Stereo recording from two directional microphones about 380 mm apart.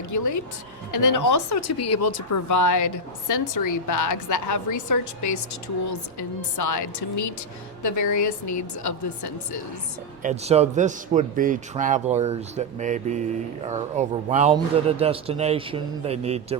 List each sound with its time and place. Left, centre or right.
0.1 s a woman's voice: left
10.2 s a man's voice: centre